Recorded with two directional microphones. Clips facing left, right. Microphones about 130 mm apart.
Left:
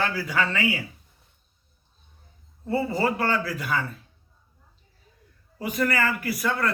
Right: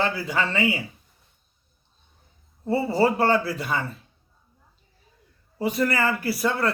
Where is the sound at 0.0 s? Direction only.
25° right (ahead or behind).